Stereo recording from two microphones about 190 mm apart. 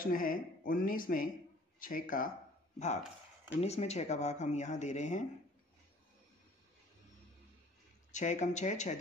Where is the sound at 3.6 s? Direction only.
35° left (ahead or behind).